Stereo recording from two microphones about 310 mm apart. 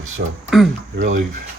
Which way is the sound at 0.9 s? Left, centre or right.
Right.